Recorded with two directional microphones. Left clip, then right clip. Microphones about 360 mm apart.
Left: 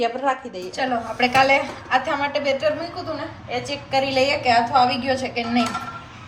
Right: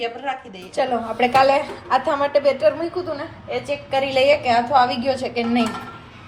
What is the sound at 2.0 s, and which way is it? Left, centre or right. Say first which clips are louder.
Speech: right 4 dB; centre.